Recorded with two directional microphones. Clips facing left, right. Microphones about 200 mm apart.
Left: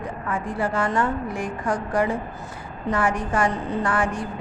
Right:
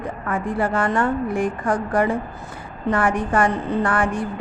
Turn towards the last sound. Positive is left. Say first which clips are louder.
# right 3 dB
turn(degrees=-55)  # may be behind; listen again after turning